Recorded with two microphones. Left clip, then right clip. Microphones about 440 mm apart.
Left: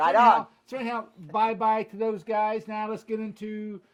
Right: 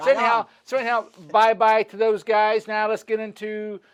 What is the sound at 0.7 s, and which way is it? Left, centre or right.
Speech, right.